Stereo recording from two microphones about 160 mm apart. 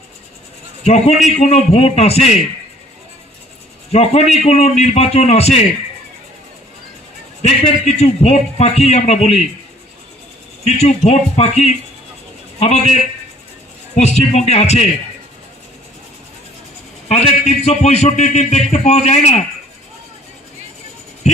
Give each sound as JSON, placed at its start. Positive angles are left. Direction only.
{"t": 0.9, "sound": "a man's voice", "side_deg": 40}
{"t": 3.9, "sound": "a man's voice", "side_deg": 40}
{"t": 7.4, "sound": "a man's voice", "side_deg": 45}
{"t": 10.7, "sound": "a man's voice", "side_deg": 40}
{"t": 17.1, "sound": "a man's voice", "side_deg": 45}
{"t": 21.2, "sound": "a sound", "side_deg": 45}